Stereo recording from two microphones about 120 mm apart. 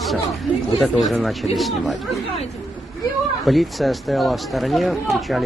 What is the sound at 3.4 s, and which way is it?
Speech, centre (ahead or behind).